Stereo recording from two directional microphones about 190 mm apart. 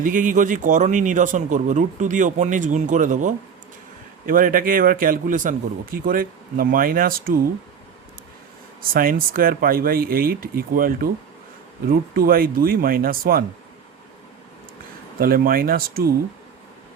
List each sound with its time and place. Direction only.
0.0 s speech: 45° right (ahead or behind)
8.8 s speech: 50° right (ahead or behind)
15.2 s speech: 50° right (ahead or behind)